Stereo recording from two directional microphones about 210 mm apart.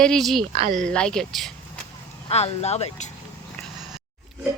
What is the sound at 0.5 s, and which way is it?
Speech, 35° right (ahead or behind).